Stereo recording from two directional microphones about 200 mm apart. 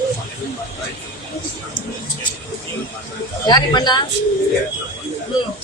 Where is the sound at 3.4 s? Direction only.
20° left (ahead or behind).